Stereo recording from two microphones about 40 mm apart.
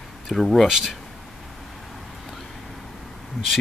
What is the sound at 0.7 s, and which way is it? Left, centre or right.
Speech, centre.